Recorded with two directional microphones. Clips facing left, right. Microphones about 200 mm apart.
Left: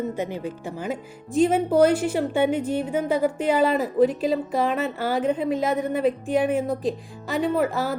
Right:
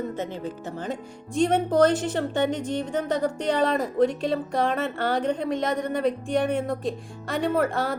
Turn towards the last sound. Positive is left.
turn(degrees=0)  # may be behind; listen again after turning